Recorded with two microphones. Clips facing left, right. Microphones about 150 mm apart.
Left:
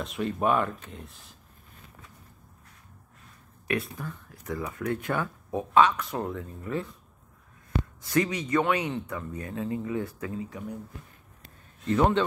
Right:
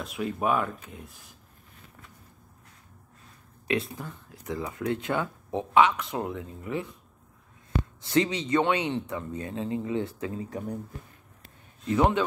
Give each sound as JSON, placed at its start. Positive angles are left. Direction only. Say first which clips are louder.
{"t": 0.0, "sound": "speech", "louder": "left 1 dB", "side_deg": -5}
{"t": 3.6, "sound": "speech", "louder": "right 1 dB", "side_deg": -25}
{"t": 8.0, "sound": "speech", "louder": "right 1 dB", "side_deg": -25}
{"t": 11.9, "sound": "a man's voice", "louder": "even", "side_deg": -10}